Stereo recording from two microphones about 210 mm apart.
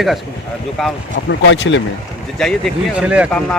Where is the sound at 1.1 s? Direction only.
60° left (ahead or behind).